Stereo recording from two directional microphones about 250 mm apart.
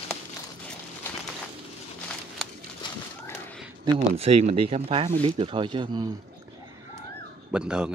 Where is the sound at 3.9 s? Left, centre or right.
Right.